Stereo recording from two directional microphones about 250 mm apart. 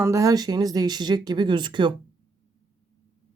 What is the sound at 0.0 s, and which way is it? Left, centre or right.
Speech, centre.